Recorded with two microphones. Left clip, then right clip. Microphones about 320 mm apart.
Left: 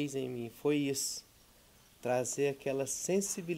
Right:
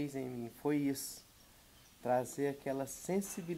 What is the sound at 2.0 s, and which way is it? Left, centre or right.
Speech, left.